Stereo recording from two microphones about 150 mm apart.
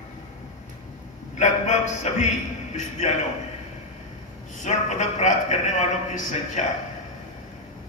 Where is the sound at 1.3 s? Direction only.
50° left (ahead or behind).